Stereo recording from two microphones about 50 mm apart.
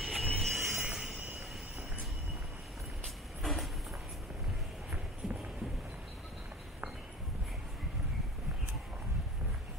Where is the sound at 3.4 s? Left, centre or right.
Centre.